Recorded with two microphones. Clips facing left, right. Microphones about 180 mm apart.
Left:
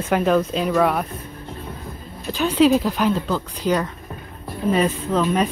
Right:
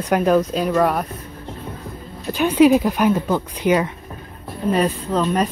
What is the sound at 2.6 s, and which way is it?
Speech, 15° right (ahead or behind).